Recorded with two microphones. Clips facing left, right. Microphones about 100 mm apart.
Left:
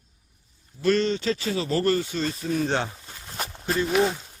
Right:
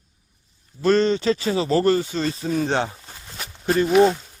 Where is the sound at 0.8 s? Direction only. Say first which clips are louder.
Right 4 dB; 35° right (ahead or behind).